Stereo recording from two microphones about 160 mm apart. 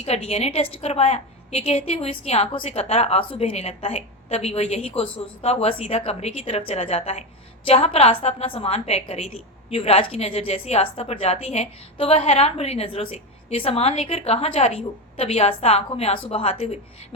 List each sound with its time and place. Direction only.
0.0 s a woman's voice: 40° left (ahead or behind)